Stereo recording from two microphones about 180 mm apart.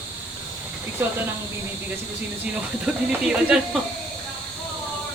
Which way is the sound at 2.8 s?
5° right (ahead or behind).